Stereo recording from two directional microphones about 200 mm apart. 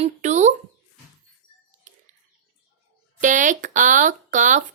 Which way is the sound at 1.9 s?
40° right (ahead or behind).